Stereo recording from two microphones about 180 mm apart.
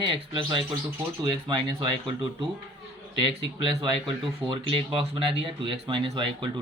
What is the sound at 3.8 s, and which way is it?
Speech, 30° right (ahead or behind).